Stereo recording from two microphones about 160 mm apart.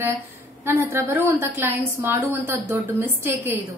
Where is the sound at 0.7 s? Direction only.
15° right (ahead or behind).